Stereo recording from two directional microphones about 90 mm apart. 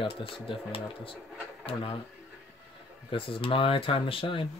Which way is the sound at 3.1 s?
80° left.